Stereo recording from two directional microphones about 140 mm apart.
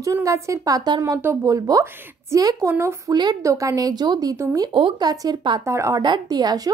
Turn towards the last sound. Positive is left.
turn(degrees=-25)  # may be behind; listen again after turning